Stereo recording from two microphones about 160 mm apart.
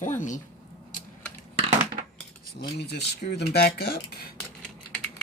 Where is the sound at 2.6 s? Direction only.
90° left; by 4.1 s 75° left (ahead or behind).